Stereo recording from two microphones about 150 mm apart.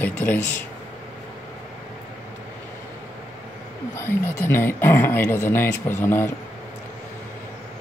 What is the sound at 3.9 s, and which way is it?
Speech, 15° left (ahead or behind).